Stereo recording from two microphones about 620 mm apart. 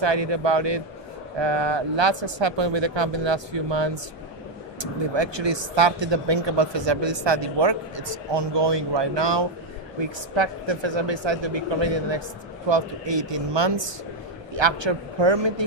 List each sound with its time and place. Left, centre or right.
0.0 s speech: right